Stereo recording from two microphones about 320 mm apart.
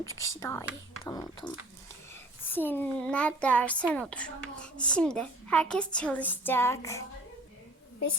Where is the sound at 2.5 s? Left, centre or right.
Centre.